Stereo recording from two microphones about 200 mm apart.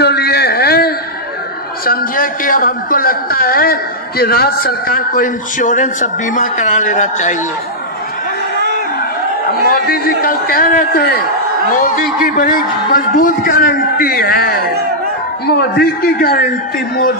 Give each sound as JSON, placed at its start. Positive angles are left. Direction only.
{"t": 0.0, "sound": "a sound", "side_deg": 55}
{"t": 1.9, "sound": "a man's voice", "side_deg": 45}
{"t": 9.7, "sound": "a man's voice", "side_deg": 45}
{"t": 12.4, "sound": "a man's voice", "side_deg": 45}